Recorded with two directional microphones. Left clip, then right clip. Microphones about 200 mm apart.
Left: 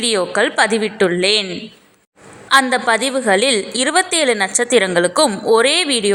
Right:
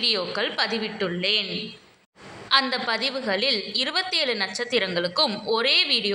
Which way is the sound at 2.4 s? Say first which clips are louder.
Left 9 dB; 40° left (ahead or behind).